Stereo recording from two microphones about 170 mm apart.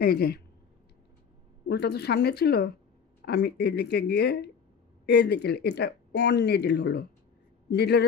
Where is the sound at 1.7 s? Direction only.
70° left (ahead or behind).